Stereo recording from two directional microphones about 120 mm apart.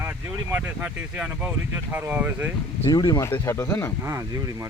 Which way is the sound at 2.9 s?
35° left (ahead or behind).